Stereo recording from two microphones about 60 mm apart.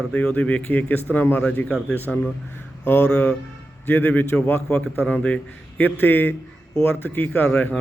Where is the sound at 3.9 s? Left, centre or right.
Left.